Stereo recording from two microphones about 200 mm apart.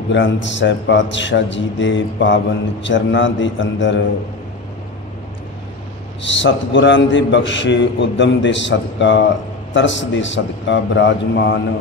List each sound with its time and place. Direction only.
0.1 s a man's voice: 65° left (ahead or behind)
6.2 s a man's voice: 65° left (ahead or behind)